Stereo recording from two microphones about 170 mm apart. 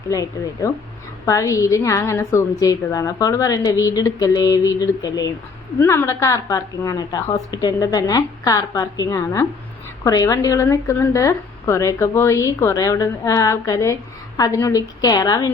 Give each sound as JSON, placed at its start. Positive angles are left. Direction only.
{"t": 0.1, "sound": "a woman's voice", "side_deg": 20}